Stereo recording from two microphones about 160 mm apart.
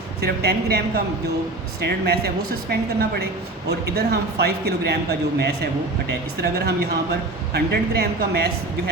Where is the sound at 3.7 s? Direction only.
90° right.